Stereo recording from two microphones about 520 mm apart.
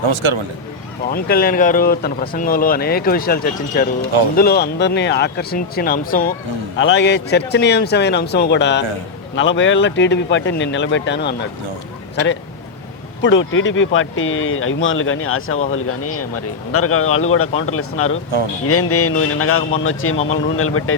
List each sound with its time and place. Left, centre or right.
0.1 s speech: right
1.1 s speech: centre
13.2 s speech: left